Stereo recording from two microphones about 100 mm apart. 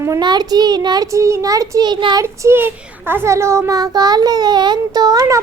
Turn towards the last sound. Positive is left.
turn(degrees=-35)  # may be behind; listen again after turning